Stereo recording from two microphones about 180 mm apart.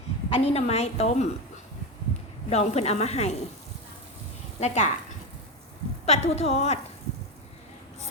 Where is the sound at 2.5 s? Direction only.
35° left (ahead or behind).